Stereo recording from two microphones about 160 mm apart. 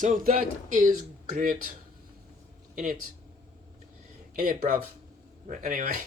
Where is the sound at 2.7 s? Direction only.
60° right (ahead or behind).